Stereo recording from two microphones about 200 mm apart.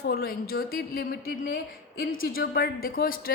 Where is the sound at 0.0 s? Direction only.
50° left (ahead or behind).